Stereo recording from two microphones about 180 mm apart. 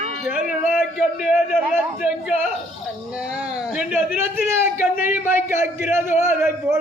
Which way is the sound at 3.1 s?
5° right (ahead or behind).